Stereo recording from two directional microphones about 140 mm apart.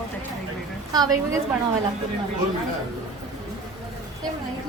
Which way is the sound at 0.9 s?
25° right (ahead or behind).